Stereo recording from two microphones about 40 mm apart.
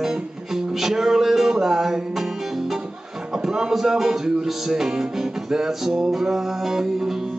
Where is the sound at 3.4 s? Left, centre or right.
Centre.